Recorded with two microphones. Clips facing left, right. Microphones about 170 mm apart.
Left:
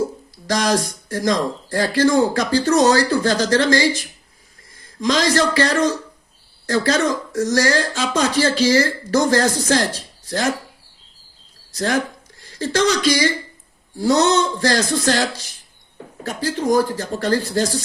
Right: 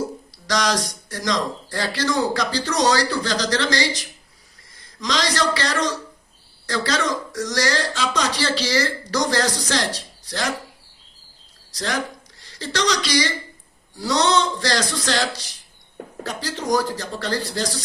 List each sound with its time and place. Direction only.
0.4 s speech: 50° left (ahead or behind)
11.7 s speech: 50° left (ahead or behind)
16.2 s speech: 50° left (ahead or behind)